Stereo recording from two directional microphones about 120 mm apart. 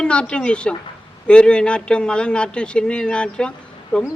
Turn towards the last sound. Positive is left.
turn(degrees=10)  # may be behind; listen again after turning